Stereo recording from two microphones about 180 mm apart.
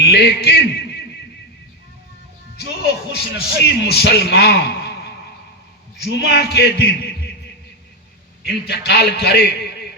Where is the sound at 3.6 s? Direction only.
65° left (ahead or behind).